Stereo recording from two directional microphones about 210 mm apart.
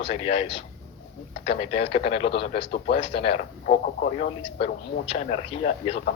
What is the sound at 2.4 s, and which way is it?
Speech, 50° left (ahead or behind).